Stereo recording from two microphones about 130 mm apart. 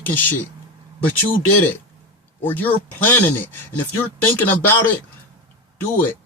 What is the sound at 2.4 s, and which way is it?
Speech, 15° left (ahead or behind).